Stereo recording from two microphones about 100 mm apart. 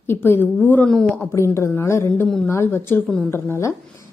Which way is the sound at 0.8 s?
5° left (ahead or behind).